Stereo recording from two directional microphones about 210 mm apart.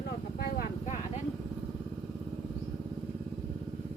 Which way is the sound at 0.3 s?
45° left (ahead or behind).